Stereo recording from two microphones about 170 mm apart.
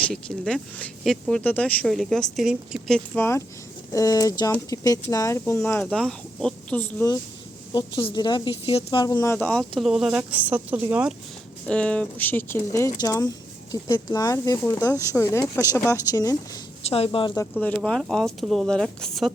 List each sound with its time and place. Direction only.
0.0 s speech: 5° left (ahead or behind)
3.2 s speech: 15° left (ahead or behind)
7.7 s speech: 25° left (ahead or behind); by 11.1 s 10° right (ahead or behind)
11.7 s speech: 5° left (ahead or behind)
16.9 s a woman's voice: 35° left (ahead or behind)
17.5 s speech: 10° left (ahead or behind)